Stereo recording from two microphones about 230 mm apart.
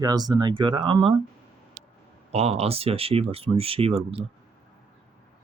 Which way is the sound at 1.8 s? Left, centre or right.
Right.